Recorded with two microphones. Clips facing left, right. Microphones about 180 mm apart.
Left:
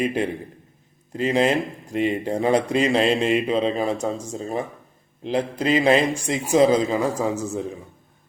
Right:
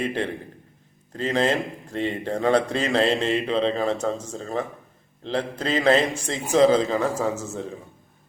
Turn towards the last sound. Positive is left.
turn(degrees=15)  # may be behind; listen again after turning